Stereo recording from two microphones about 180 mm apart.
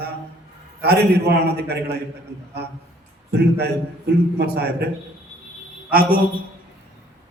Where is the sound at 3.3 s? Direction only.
65° right (ahead or behind).